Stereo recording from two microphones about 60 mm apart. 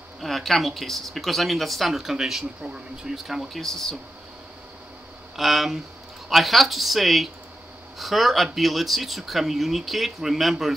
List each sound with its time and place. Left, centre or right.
0.2 s speech: centre
3.3 s speech: centre
5.3 s speech: centre